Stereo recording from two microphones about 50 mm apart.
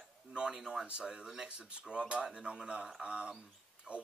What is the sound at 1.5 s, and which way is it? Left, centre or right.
Speech, right.